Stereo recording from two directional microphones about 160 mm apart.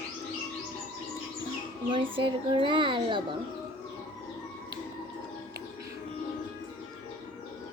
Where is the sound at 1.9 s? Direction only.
35° right (ahead or behind).